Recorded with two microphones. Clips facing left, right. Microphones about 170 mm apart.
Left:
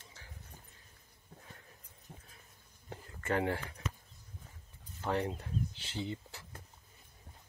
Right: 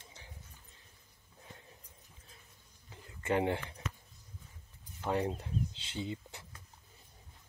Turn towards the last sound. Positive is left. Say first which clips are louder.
# even
turn(degrees=-20)  # may be behind; listen again after turning